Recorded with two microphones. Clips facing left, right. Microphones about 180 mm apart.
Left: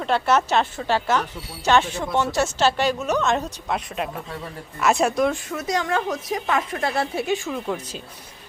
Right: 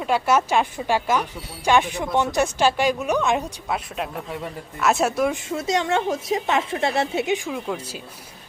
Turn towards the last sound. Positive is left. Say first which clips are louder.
# left 1 dB
turn(degrees=-10)  # may be behind; listen again after turning